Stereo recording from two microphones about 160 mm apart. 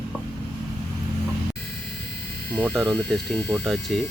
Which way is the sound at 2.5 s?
5° left (ahead or behind).